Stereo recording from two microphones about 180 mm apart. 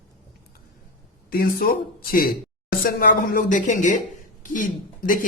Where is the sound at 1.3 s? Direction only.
55° left (ahead or behind).